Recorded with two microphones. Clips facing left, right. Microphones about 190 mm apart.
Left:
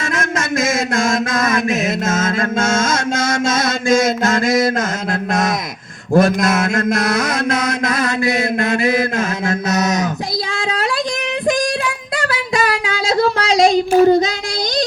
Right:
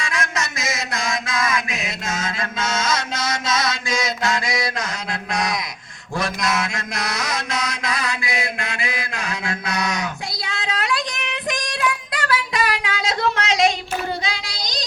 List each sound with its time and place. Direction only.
0.0 s mantra: 50° left (ahead or behind)
5.3 s a sound: 50° left (ahead or behind)
6.1 s mantra: 50° left (ahead or behind)
11.8 s music: 30° left (ahead or behind)